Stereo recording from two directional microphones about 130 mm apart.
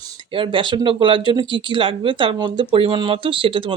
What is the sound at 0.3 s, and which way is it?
Speech, 40° right (ahead or behind).